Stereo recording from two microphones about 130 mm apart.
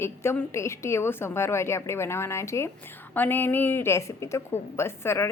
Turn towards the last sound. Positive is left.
turn(degrees=20)  # may be behind; listen again after turning